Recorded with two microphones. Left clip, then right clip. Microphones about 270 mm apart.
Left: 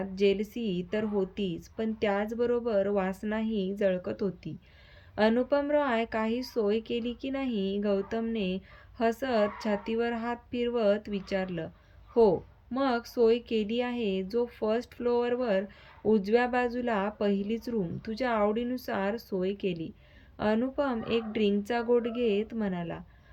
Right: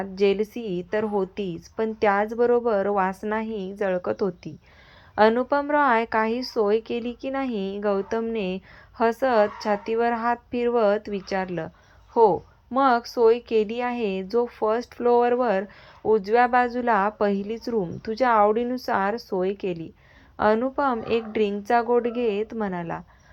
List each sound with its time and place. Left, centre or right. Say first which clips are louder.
0.2 s a woman's voice: right 5 dB; centre